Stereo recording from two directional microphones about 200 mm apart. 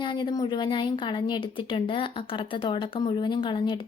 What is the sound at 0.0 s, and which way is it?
A woman's voice, 25° left (ahead or behind).